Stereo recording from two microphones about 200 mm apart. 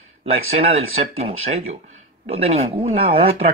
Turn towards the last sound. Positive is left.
turn(degrees=-30)  # may be behind; listen again after turning